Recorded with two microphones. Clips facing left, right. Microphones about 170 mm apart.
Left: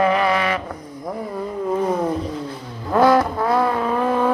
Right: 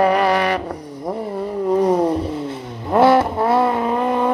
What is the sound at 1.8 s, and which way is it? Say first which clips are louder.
Vehicle: right 4 dB; 35° right (ahead or behind).